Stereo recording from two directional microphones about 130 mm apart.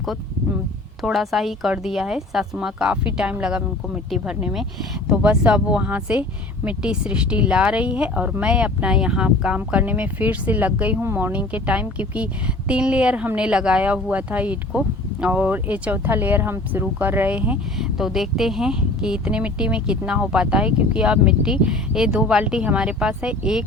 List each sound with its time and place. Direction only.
1.0 s speech: centre (ahead or behind)